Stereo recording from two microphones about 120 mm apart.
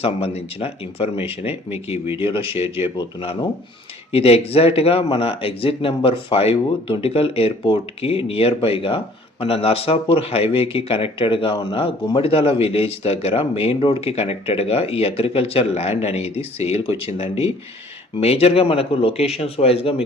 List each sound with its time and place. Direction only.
0.0 s speech: 55° left (ahead or behind)
2.9 s speech: 35° left (ahead or behind)
4.1 s speech: 55° left (ahead or behind)